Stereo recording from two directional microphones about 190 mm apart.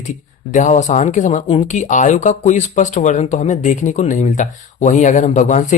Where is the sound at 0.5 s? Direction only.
40° left (ahead or behind).